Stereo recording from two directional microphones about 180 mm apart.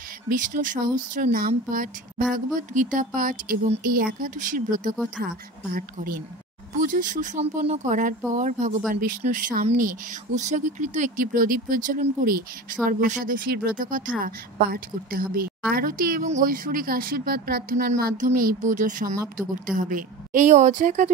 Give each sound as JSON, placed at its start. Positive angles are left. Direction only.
{"t": 0.3, "sound": "a woman's voice", "side_deg": -45}
{"t": 3.8, "sound": "a woman's voice", "side_deg": -55}